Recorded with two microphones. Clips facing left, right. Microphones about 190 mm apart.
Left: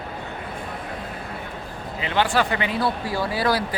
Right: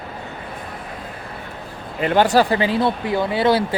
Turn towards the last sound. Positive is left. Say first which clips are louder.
# right 5 dB
turn(degrees=-25)  # may be behind; listen again after turning